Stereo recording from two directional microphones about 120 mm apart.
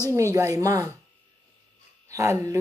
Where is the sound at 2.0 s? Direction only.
25° right (ahead or behind).